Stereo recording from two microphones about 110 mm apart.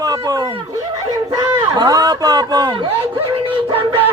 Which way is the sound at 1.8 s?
35° right (ahead or behind).